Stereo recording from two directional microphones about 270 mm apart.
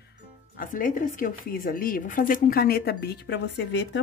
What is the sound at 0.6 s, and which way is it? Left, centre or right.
A woman's voice, left.